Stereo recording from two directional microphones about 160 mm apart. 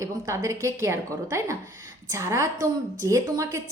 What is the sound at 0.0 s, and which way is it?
A woman's voice, 20° right (ahead or behind).